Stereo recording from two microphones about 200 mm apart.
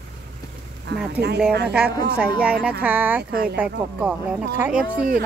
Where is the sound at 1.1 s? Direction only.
55° right (ahead or behind).